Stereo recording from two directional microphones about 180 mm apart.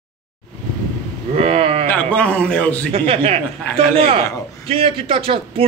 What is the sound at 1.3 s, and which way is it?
Boat, 35° right (ahead or behind).